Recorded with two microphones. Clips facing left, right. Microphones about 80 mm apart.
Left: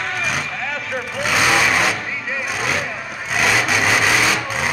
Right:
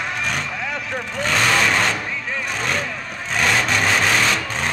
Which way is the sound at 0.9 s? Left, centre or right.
Centre.